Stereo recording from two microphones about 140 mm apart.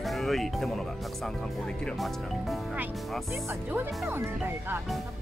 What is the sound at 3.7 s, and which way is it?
Speech, 15° right (ahead or behind).